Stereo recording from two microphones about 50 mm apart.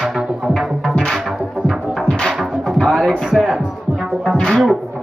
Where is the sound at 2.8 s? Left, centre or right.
Centre.